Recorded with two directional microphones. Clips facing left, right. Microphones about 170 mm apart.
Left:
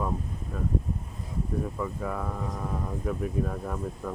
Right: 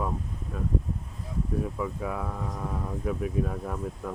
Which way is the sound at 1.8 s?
5° right (ahead or behind).